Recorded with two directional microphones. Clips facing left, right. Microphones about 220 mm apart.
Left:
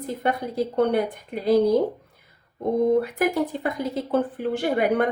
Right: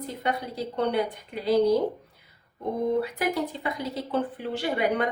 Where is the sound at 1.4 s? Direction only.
50° left (ahead or behind).